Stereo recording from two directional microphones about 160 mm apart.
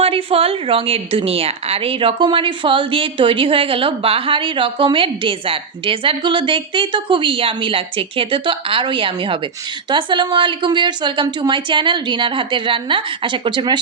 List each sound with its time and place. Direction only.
0.0 s a woman's voice: 35° right (ahead or behind)